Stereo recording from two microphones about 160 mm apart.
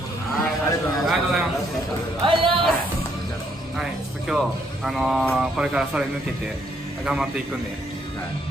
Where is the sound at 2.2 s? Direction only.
30° right (ahead or behind).